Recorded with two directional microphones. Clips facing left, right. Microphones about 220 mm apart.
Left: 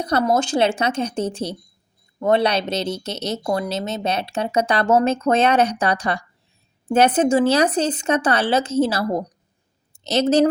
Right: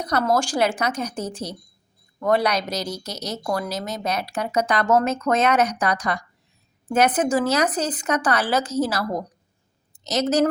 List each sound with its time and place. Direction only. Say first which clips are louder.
0.0 s speech: left 2 dB; 25° left (ahead or behind)